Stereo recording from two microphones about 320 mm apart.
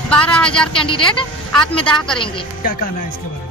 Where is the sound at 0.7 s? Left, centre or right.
Centre.